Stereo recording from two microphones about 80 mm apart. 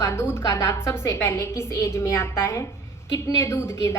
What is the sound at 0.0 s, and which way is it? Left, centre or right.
A woman's voice, left.